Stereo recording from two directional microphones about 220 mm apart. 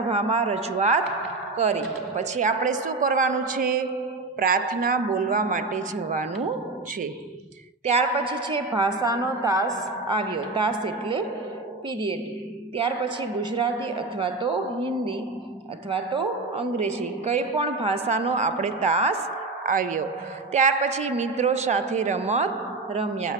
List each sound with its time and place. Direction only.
0.1 s a woman's voice: 30° right (ahead or behind)
7.8 s a woman's voice: 25° right (ahead or behind)
12.7 s a woman's voice: 25° right (ahead or behind)